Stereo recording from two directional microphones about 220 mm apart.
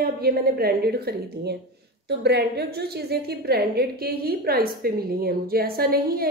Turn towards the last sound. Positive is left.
turn(degrees=-45)  # may be behind; listen again after turning